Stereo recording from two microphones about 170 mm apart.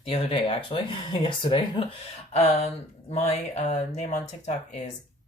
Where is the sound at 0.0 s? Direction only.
35° left (ahead or behind).